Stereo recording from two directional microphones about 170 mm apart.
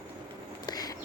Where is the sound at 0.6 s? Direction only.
25° left (ahead or behind).